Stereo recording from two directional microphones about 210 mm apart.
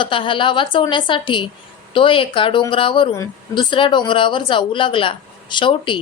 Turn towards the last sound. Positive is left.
turn(degrees=25)  # may be behind; listen again after turning